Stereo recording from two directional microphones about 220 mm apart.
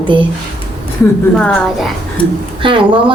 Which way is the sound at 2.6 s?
20° right (ahead or behind).